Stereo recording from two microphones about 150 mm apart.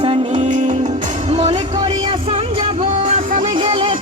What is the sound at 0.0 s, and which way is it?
Music, 40° right (ahead or behind).